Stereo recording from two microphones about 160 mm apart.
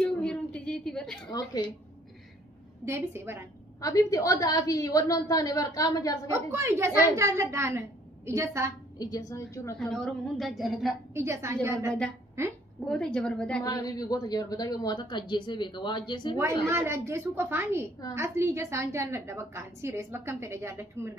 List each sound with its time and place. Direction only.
0.0 s a sound: 5° left (ahead or behind)
1.3 s speech: 25° left (ahead or behind)
2.8 s a woman's voice: 15° right (ahead or behind)
3.8 s speech: 20° left (ahead or behind)
6.3 s a woman's voice: 15° right (ahead or behind)
8.9 s speech: 25° left (ahead or behind)
9.8 s a woman's voice: 5° left (ahead or behind)
11.1 s a woman's voice: 15° right (ahead or behind)
12.8 s a woman's voice: 5° left (ahead or behind)
13.7 s speech: 25° left (ahead or behind)
16.6 s a woman's voice: 15° right (ahead or behind)